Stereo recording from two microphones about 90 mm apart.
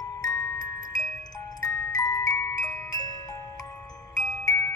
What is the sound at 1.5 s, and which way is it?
Music, 40° left (ahead or behind).